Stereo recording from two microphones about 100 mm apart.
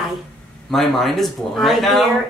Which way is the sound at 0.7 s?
Centre (ahead or behind).